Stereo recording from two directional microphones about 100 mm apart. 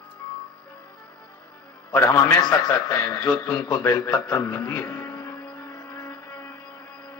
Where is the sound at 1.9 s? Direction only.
25° left (ahead or behind).